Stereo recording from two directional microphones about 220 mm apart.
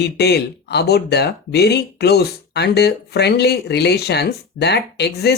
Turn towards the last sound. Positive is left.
turn(degrees=50)  # may be behind; listen again after turning